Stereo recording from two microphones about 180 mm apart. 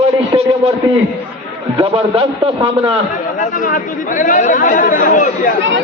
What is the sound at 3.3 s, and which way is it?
Speech, 45° left (ahead or behind).